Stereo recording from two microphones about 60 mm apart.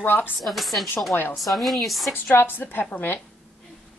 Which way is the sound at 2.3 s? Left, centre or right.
Left.